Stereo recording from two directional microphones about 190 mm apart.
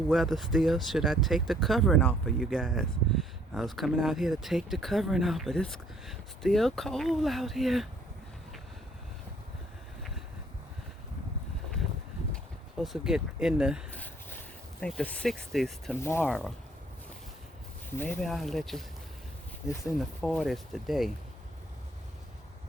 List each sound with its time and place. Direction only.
0.1 s speech: centre (ahead or behind)
12.8 s speech: centre (ahead or behind)
13.9 s a sound: 10° left (ahead or behind)
14.8 s speech: 5° left (ahead or behind)
16.0 s speech: 10° left (ahead or behind)
17.9 s speech: 10° left (ahead or behind)
19.8 s speech: centre (ahead or behind)